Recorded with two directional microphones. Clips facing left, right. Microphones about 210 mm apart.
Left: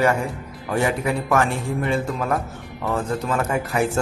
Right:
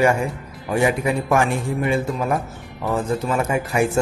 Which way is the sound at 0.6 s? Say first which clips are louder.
Right 2 dB; 15° right (ahead or behind).